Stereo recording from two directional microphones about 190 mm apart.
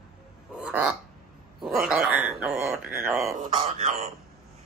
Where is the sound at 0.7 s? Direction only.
5° right (ahead or behind).